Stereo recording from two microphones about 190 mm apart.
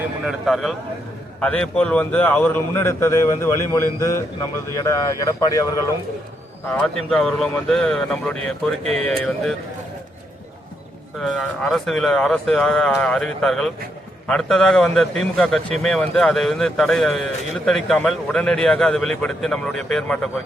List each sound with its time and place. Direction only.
0.3 s a man's voice: centre (ahead or behind); by 5.8 s 20° left (ahead or behind)
6.8 s a man's voice: 5° left (ahead or behind)
11.2 s a man's voice: centre (ahead or behind)